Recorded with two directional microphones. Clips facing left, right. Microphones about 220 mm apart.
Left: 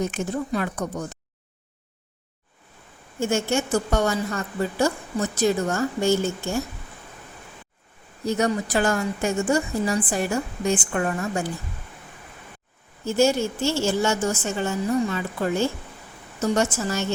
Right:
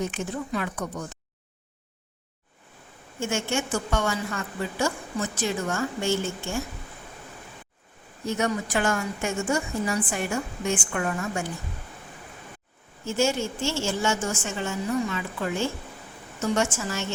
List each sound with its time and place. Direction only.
0.0 s a woman's voice: 40° left (ahead or behind)
3.2 s a woman's voice: 40° left (ahead or behind)
8.2 s a woman's voice: 35° left (ahead or behind)
13.1 s a woman's voice: 35° left (ahead or behind)